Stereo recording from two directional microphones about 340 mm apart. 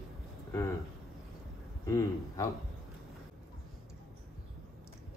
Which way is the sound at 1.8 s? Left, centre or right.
Centre.